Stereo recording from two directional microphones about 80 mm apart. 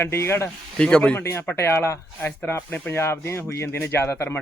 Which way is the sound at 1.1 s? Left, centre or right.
Left.